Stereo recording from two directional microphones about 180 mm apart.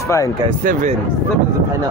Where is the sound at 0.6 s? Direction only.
50° right (ahead or behind).